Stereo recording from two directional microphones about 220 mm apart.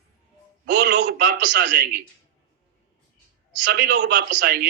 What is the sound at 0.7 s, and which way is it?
Speech, 55° right (ahead or behind).